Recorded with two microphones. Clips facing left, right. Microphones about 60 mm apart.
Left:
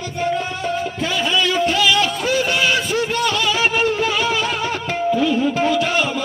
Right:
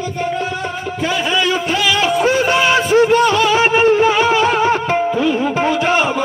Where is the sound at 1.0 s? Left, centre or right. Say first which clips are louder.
Right 4 dB; right.